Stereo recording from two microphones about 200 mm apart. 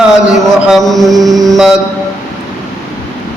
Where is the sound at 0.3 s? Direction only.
Centre (ahead or behind).